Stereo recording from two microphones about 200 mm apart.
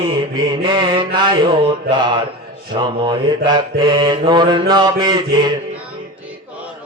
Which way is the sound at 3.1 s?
20° right (ahead or behind).